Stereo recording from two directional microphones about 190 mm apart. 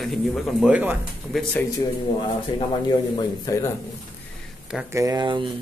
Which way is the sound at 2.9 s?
20° left (ahead or behind).